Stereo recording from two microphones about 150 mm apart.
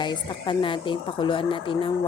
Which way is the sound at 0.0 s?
30° left (ahead or behind).